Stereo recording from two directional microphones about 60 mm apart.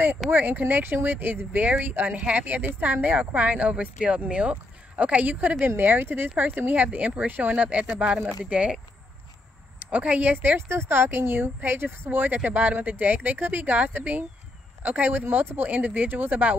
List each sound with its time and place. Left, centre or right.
0.3 s speech: right
5.6 s speech: right; by 8.7 s centre
9.8 s speech: right
10.7 s speech: right